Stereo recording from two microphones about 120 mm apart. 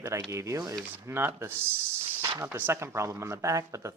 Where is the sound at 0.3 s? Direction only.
25° right (ahead or behind).